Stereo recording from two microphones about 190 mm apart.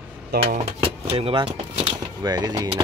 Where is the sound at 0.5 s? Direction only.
30° right (ahead or behind).